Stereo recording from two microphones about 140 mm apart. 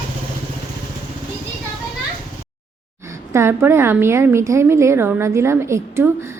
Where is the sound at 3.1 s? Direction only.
20° right (ahead or behind).